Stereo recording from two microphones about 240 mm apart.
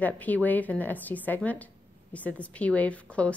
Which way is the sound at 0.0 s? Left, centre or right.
Centre.